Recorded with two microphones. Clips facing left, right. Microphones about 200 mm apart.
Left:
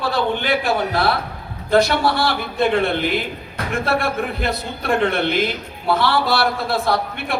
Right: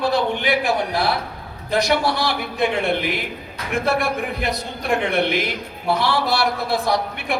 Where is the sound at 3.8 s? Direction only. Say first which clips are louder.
Even; 15° right (ahead or behind).